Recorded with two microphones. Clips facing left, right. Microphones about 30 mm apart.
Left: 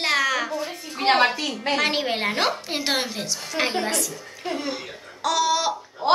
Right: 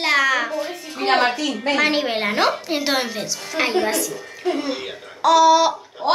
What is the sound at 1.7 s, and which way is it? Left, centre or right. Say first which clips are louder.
A woman's voice: right 3 dB; centre.